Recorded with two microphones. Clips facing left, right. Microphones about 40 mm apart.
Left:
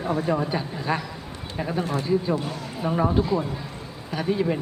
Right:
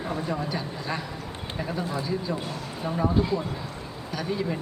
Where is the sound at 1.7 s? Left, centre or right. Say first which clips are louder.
Left 5 dB; left.